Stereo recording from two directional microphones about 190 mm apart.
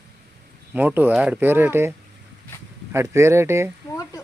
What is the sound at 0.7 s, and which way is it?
Speech, 10° right (ahead or behind).